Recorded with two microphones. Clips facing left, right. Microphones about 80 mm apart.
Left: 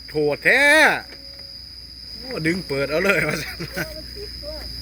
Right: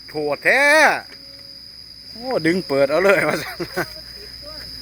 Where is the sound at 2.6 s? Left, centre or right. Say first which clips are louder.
Right 6 dB; right.